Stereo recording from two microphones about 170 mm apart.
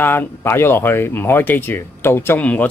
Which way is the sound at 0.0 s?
10° left (ahead or behind).